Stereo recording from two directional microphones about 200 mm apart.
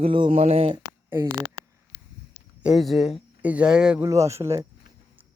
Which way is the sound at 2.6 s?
Centre (ahead or behind).